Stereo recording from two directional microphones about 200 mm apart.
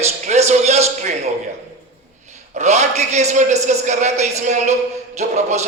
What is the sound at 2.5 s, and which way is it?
A man's voice, 35° right (ahead or behind).